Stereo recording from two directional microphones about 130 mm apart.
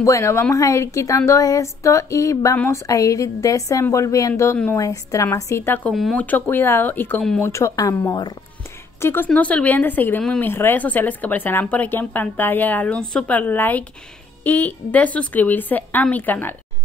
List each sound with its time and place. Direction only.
0.0 s a woman's voice: 25° left (ahead or behind)
9.0 s a woman's voice: 15° left (ahead or behind)